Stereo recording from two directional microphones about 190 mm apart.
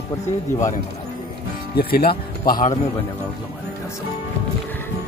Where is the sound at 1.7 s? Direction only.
55° left (ahead or behind).